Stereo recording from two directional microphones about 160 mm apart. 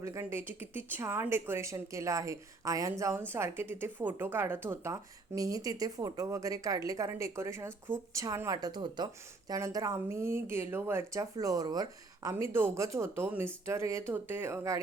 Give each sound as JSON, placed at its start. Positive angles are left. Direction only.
{"t": 0.0, "sound": "speech", "side_deg": -15}